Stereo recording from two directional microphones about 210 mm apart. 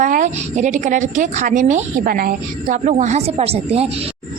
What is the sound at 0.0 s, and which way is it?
A woman's voice, 35° right (ahead or behind).